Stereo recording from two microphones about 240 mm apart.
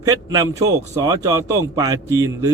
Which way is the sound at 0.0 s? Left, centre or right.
Centre.